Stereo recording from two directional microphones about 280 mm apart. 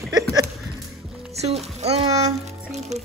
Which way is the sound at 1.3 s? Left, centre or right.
Right.